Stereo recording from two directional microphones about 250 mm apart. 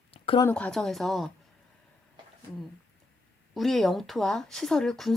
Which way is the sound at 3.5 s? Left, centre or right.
Centre.